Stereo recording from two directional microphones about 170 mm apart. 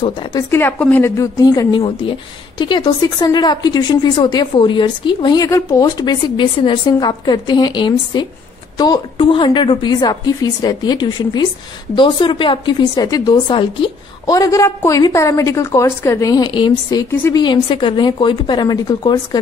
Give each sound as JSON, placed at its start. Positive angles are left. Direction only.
{"t": 0.3, "sound": "a woman's voice", "side_deg": 15}
{"t": 17.1, "sound": "a woman's voice", "side_deg": 10}
{"t": 17.4, "sound": "a woman's voice", "side_deg": 30}